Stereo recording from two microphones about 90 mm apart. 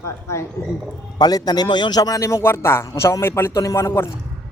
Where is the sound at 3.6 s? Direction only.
40° left (ahead or behind).